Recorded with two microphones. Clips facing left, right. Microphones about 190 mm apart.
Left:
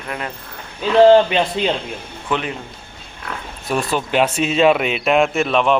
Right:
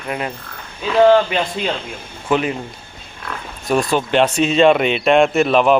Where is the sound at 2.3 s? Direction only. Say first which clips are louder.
Right 5 dB; 5° right (ahead or behind).